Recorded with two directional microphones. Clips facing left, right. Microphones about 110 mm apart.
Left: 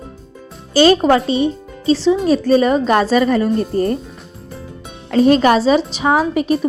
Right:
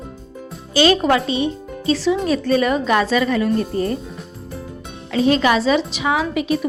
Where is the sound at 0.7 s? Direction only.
40° left (ahead or behind).